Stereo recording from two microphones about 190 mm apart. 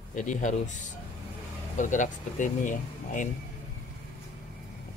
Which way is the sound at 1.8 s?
40° left (ahead or behind).